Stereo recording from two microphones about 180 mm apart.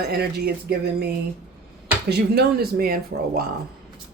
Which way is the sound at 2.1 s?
65° right (ahead or behind).